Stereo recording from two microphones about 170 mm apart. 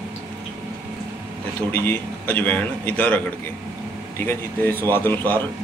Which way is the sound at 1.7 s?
10° left (ahead or behind).